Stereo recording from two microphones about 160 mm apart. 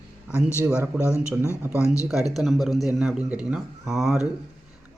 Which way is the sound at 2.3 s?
Centre (ahead or behind).